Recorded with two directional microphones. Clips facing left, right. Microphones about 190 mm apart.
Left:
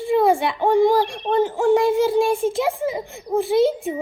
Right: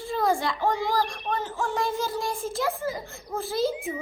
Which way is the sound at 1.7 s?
60° left (ahead or behind).